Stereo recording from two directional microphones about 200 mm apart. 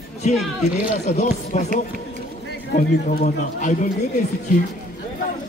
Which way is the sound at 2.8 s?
40° left (ahead or behind).